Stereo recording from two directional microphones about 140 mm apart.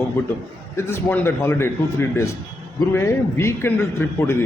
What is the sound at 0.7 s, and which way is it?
A man's voice, 15° left (ahead or behind).